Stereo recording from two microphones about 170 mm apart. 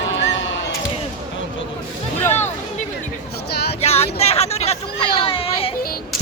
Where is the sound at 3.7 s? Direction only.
40° left (ahead or behind).